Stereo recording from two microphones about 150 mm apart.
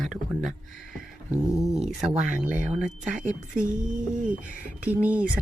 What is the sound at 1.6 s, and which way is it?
Speech, centre (ahead or behind).